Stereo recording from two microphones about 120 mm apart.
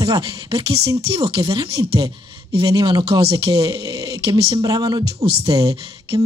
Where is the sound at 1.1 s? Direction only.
50° right (ahead or behind).